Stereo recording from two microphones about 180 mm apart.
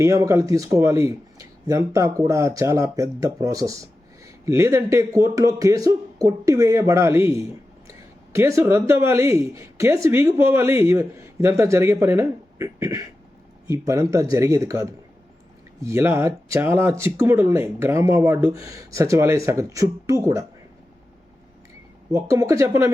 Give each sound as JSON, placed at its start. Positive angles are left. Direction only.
{"t": 0.0, "sound": "speech", "side_deg": -15}
{"t": 22.1, "sound": "speech", "side_deg": -15}